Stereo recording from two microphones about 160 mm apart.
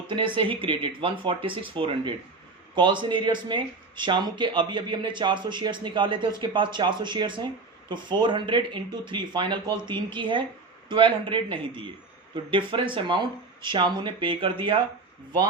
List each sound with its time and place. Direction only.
0.3 s a man's voice: 35° right (ahead or behind)